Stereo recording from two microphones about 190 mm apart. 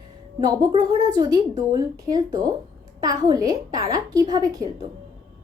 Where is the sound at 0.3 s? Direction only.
25° right (ahead or behind).